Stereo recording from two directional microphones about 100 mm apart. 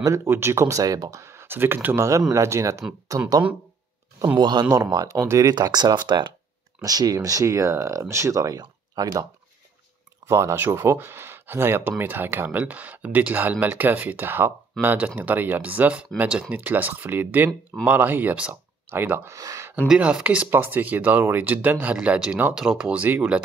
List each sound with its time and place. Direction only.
0.0 s speech: 30° right (ahead or behind)
4.4 s speech: 50° right (ahead or behind)
4.6 s speech: 30° right (ahead or behind); by 6.3 s 50° right (ahead or behind)
6.8 s speech: 40° right (ahead or behind); by 19.3 s 20° right (ahead or behind)
19.3 s speech: 35° right (ahead or behind)
20.0 s speech: 15° right (ahead or behind)